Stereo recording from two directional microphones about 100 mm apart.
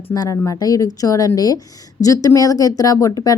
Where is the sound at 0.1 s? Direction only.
35° left (ahead or behind).